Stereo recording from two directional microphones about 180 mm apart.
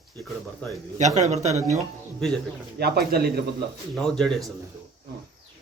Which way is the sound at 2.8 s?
60° right (ahead or behind).